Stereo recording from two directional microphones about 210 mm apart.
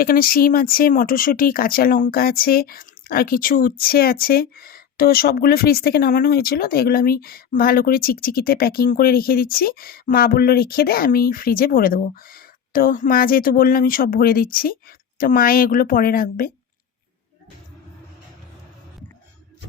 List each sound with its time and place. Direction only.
0.0 s speech: 45° left (ahead or behind)